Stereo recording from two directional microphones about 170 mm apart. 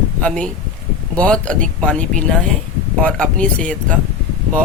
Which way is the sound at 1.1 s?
5° left (ahead or behind).